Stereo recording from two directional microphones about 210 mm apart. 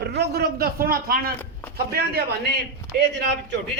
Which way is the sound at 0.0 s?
50° right (ahead or behind).